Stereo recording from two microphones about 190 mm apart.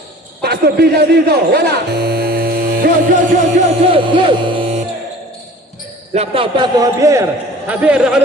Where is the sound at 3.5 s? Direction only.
35° right (ahead or behind).